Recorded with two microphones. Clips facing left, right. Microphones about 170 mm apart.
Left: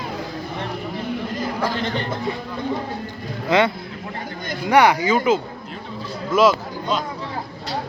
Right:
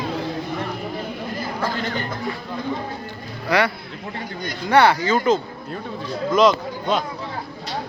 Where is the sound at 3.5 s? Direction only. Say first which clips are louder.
Left 2 dB; 25° left (ahead or behind).